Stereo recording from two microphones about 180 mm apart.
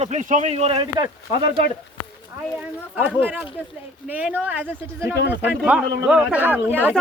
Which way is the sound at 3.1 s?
10° right (ahead or behind).